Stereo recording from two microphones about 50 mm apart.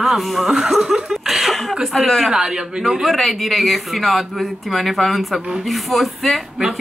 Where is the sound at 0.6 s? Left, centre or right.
Centre.